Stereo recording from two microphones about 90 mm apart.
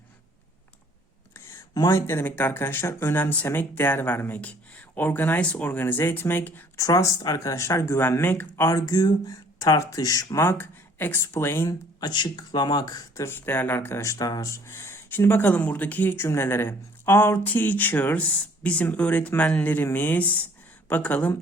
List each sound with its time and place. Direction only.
1.9 s speech: 30° left (ahead or behind)
6.7 s speech: 40° left (ahead or behind)
8.7 s speech: 50° left (ahead or behind); by 11.7 s 25° left (ahead or behind)
11.7 s speech: 50° left (ahead or behind)
13.2 s speech: 25° left (ahead or behind); by 14.5 s 45° left (ahead or behind)
14.5 s speech: 30° left (ahead or behind)